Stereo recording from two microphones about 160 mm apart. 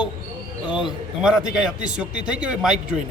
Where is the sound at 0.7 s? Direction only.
30° left (ahead or behind).